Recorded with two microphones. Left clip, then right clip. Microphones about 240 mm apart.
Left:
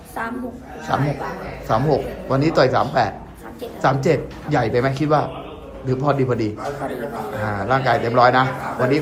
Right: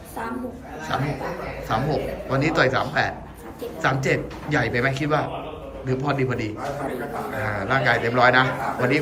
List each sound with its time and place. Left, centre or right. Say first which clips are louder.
1.6 s a man's voice: left 6 dB; left